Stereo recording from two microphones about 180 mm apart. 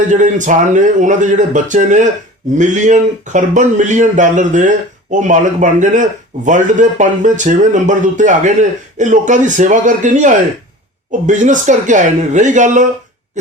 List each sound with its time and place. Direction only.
0.1 s speech: 45° right (ahead or behind)
13.4 s owl: 45° right (ahead or behind)